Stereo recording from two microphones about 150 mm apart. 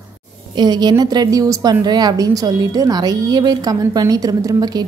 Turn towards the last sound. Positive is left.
turn(degrees=-25)  # may be behind; listen again after turning